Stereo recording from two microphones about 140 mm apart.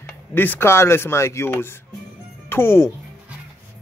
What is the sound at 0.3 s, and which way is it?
Speech, 15° left (ahead or behind).